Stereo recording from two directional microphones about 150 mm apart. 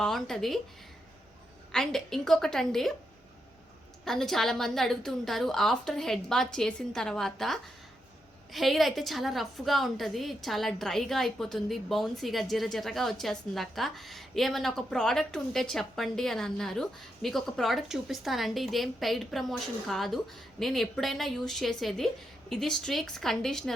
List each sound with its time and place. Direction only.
0.0 s a woman's voice: centre (ahead or behind)
1.7 s a woman's voice: 5° left (ahead or behind)
4.0 s a woman's voice: 5° left (ahead or behind)